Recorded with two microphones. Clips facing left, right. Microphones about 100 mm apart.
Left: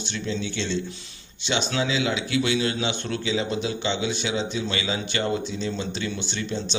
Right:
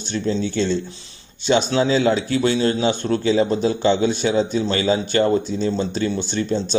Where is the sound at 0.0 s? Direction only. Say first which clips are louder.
Right 7 dB; 40° right (ahead or behind).